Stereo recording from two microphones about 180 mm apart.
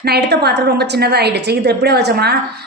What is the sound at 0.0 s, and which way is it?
A woman's voice, 65° right (ahead or behind).